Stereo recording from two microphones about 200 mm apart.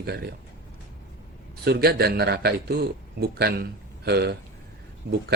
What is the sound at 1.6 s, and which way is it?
Speech, 55° right (ahead or behind).